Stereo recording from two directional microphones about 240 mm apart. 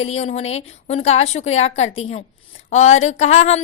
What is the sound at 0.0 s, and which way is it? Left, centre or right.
A woman's voice, left.